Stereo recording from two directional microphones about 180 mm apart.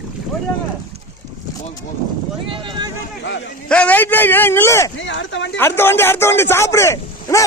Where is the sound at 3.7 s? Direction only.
5° left (ahead or behind).